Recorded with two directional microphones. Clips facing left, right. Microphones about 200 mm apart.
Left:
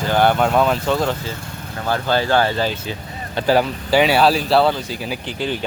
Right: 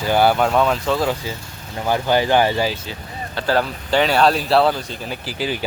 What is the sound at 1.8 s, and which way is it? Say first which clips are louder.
Speech: right 2 dB; 15° right (ahead or behind).